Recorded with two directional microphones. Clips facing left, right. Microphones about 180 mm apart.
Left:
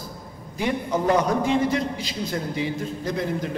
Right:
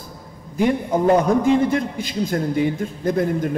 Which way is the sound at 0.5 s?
50° right (ahead or behind).